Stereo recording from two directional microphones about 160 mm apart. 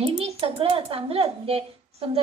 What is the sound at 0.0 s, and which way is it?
A child's voice, 35° right (ahead or behind).